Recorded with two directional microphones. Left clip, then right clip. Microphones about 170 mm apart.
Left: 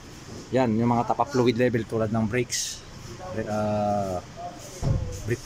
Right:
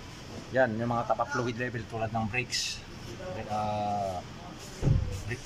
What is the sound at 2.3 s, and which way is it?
Speech, 40° left (ahead or behind).